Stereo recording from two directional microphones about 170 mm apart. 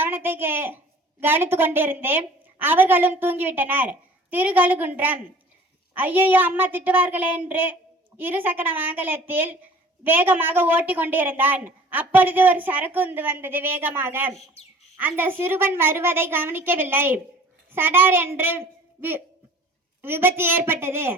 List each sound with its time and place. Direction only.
0.0 s a child's voice: 10° right (ahead or behind)
14.6 s bird: 35° left (ahead or behind)
14.9 s a woman's voice: 10° right (ahead or behind)
20.0 s a woman's voice: 15° right (ahead or behind)